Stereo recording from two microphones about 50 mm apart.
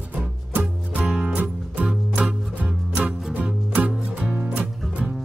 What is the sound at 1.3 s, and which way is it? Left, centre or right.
Music, right.